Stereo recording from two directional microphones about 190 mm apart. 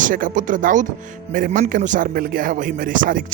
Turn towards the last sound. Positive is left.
turn(degrees=-45)  # may be behind; listen again after turning